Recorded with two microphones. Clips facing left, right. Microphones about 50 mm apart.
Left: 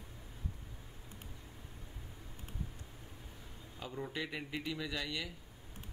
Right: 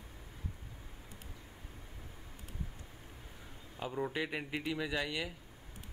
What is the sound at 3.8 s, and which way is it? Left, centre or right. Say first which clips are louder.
Speech: right 5 dB; centre.